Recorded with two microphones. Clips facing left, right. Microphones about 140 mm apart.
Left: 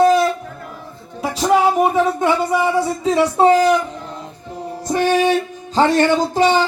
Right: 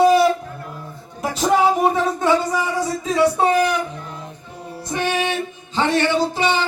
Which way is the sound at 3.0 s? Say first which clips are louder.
Left 3 dB; 25° left (ahead or behind).